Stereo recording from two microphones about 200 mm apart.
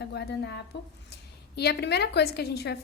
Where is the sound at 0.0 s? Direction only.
55° left (ahead or behind).